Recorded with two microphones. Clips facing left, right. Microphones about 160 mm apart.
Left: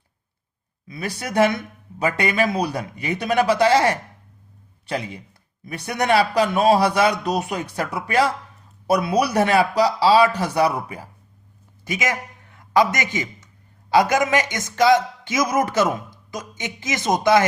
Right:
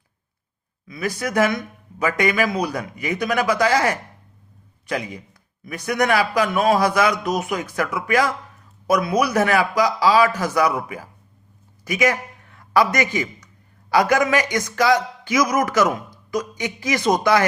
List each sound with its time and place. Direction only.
0.9 s a man's voice: 30° left (ahead or behind)
11.9 s speech: 20° left (ahead or behind)